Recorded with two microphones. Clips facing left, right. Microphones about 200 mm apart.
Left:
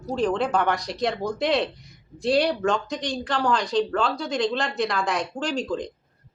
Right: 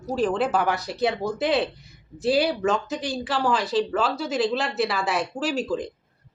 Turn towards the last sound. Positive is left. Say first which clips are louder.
# right 1 dB
turn(degrees=-5)  # may be behind; listen again after turning